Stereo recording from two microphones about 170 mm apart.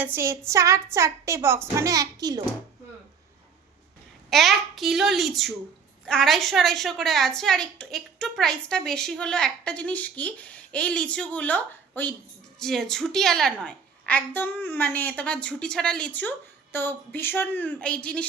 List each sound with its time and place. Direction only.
0.0 s a woman's voice: 15° right (ahead or behind)
4.3 s a woman's voice: centre (ahead or behind)